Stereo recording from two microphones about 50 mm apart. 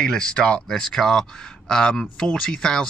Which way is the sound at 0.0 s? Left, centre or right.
Centre.